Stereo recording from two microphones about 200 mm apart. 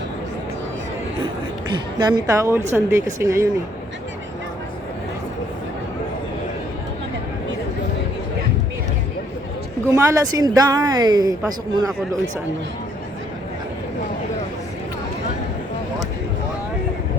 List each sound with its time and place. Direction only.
2.0 s a woman's voice: 20° right (ahead or behind)
9.8 s speech: 15° right (ahead or behind)